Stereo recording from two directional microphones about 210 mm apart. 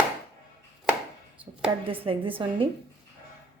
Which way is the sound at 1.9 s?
25° right (ahead or behind).